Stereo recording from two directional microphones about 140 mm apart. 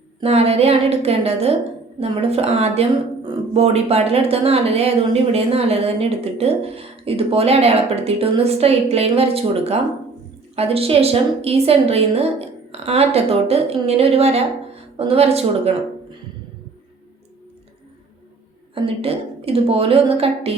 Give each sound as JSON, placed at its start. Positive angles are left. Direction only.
{"t": 0.2, "sound": "speech", "side_deg": -45}
{"t": 18.7, "sound": "speech", "side_deg": -40}